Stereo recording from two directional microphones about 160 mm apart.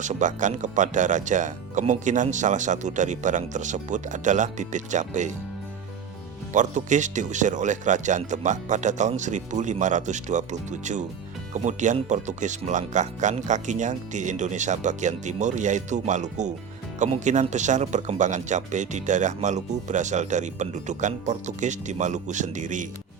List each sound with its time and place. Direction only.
0.0 s speech: 50° right (ahead or behind)
6.5 s speech: 50° right (ahead or behind)